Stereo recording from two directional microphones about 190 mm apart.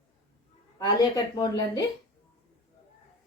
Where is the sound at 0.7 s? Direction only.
20° left (ahead or behind).